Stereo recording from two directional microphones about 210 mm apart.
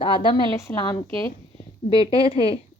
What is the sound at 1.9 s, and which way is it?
Speech, 25° left (ahead or behind).